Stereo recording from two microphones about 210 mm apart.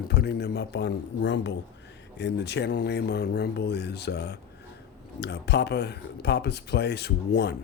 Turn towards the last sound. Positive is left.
turn(degrees=50)  # may be behind; listen again after turning